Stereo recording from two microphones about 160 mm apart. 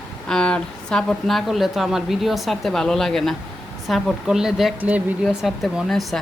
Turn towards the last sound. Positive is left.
turn(degrees=0)  # may be behind; listen again after turning